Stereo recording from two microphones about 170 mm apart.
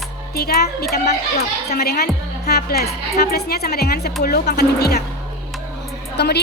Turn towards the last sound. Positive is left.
turn(degrees=75)  # may be behind; listen again after turning